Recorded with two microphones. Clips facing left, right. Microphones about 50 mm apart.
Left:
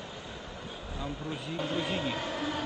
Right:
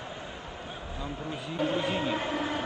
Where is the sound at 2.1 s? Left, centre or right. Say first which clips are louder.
Right 3 dB; right.